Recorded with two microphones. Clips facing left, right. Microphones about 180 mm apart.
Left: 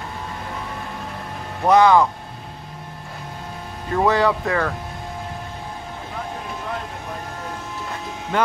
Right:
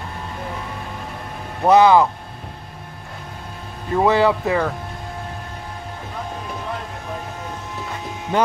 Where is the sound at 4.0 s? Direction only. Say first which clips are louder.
Right 2 dB; 20° right (ahead or behind).